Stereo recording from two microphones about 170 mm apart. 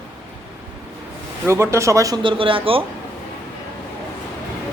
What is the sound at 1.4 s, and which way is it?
A woman's voice, 15° right (ahead or behind).